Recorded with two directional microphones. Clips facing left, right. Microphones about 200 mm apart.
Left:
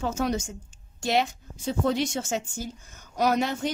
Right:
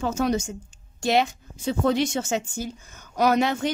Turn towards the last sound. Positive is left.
turn(degrees=-80)